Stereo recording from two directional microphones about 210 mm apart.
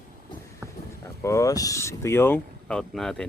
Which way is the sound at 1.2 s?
15° left (ahead or behind).